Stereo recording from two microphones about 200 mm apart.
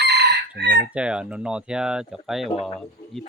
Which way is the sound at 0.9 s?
5° right (ahead or behind).